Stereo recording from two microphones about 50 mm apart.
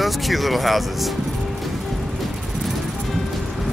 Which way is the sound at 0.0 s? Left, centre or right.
Centre.